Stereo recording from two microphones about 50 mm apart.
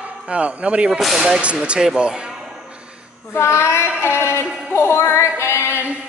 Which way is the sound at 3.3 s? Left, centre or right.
Left.